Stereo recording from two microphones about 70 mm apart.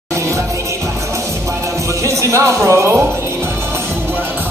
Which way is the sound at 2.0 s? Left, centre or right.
Right.